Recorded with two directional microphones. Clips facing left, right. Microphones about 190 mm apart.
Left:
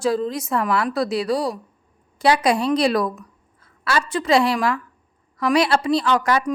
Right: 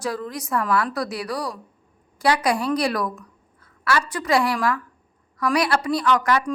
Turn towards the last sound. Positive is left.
turn(degrees=25)  # may be behind; listen again after turning